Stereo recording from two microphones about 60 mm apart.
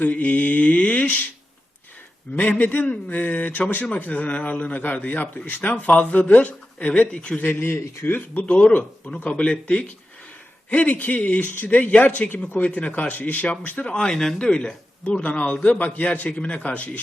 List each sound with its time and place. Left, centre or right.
0.0 s speech: left
2.3 s speech: left
7.3 s speech: left
8.4 s speech: centre
13.8 s speech: centre